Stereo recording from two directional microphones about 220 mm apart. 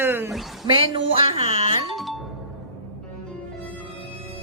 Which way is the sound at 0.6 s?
25° right (ahead or behind).